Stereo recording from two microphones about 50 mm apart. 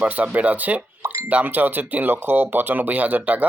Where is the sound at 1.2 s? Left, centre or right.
Right.